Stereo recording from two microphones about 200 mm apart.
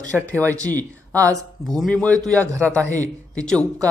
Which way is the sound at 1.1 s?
15° right (ahead or behind).